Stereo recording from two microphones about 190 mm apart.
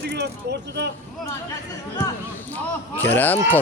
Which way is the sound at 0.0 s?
60° right (ahead or behind).